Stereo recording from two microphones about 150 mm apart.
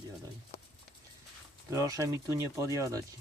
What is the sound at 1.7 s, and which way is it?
Speech, 20° right (ahead or behind).